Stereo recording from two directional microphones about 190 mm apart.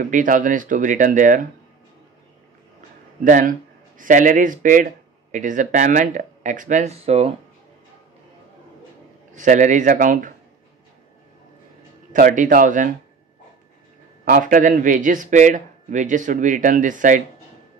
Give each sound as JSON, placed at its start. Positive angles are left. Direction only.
{"t": 0.0, "sound": "speech", "side_deg": -45}
{"t": 3.3, "sound": "speech", "side_deg": -45}
{"t": 9.3, "sound": "speech", "side_deg": -40}
{"t": 12.1, "sound": "speech", "side_deg": -45}
{"t": 14.2, "sound": "speech", "side_deg": -45}